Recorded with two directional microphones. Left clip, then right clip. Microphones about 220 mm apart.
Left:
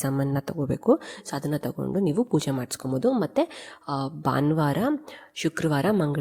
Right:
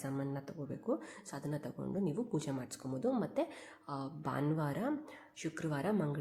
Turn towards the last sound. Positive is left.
turn(degrees=40)  # may be behind; listen again after turning